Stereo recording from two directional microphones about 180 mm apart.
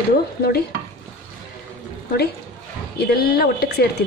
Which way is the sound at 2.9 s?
60° left (ahead or behind).